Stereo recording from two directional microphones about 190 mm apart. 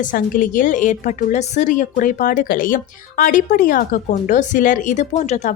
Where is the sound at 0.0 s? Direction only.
45° left (ahead or behind).